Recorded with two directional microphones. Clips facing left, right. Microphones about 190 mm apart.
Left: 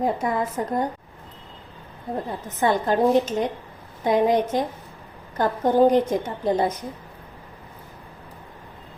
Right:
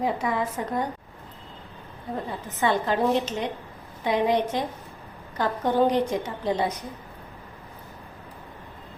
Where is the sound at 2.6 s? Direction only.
45° left (ahead or behind).